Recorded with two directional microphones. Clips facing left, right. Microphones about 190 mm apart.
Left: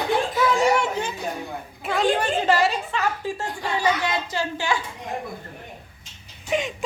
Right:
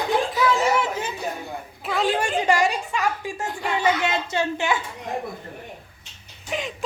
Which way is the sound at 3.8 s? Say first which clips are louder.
Right 1 dB; 25° right (ahead or behind).